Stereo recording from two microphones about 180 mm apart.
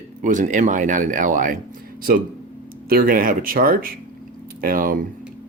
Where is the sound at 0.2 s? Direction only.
45° right (ahead or behind).